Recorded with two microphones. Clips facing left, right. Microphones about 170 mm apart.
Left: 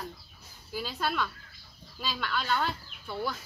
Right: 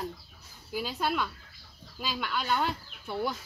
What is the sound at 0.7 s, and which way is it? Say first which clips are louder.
A child's voice: right 1 dB; 10° right (ahead or behind).